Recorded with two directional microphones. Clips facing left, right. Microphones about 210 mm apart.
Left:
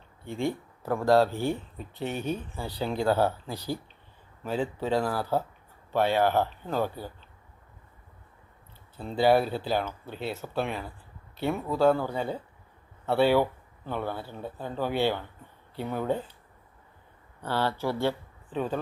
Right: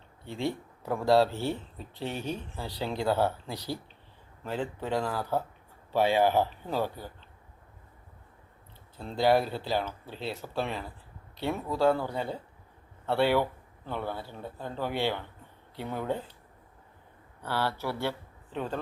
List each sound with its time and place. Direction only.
0.3 s speech: 50° left (ahead or behind)
0.8 s speech: 5° right (ahead or behind)
5.9 s speech: 10° right (ahead or behind)
9.0 s speech: 5° left (ahead or behind)
17.4 s speech: 15° left (ahead or behind)